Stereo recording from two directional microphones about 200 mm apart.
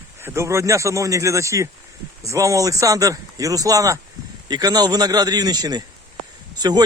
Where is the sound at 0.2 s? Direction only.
15° right (ahead or behind).